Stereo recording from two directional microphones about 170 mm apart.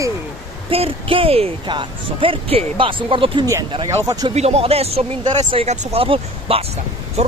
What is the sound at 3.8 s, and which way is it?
Speech, 20° right (ahead or behind).